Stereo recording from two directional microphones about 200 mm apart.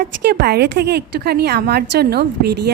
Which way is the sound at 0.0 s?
55° right (ahead or behind).